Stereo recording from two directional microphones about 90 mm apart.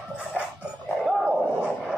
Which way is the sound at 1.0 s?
15° right (ahead or behind).